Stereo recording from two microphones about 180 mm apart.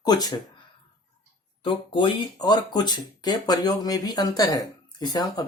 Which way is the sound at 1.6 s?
25° left (ahead or behind).